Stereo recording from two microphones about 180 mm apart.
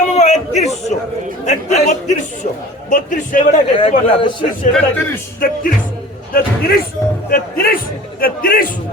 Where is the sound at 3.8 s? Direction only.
30° left (ahead or behind).